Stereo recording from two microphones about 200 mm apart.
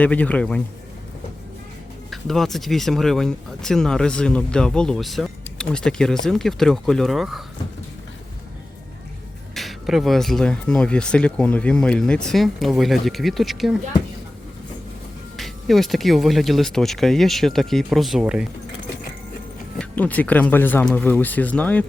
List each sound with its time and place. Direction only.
0.0 s speech: 5° left (ahead or behind)
2.0 s speech: centre (ahead or behind)
9.6 s speech: centre (ahead or behind)
15.4 s speech: centre (ahead or behind)
19.8 s speech: 10° left (ahead or behind)